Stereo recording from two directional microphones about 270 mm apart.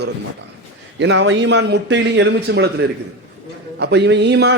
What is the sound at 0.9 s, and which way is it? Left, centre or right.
A man's voice, right.